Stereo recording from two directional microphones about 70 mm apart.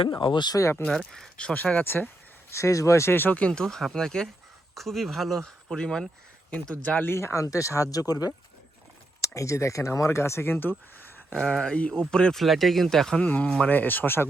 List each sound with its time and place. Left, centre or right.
0.1 s speech: left
0.6 s speech: left
0.9 s speech: centre
1.5 s speech: left
2.5 s speech: left; by 3.6 s centre
3.6 s speech: centre
7.0 s speech: left
7.4 s speech: left
9.2 s speech: left
11.3 s speech: centre
13.2 s speech: left